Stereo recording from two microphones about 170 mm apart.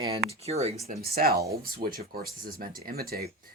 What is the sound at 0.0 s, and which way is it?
Speech, 30° right (ahead or behind).